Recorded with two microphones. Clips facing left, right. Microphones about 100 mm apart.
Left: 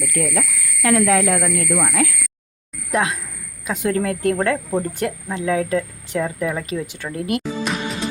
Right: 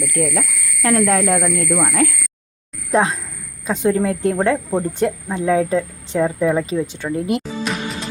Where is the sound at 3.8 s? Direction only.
10° right (ahead or behind).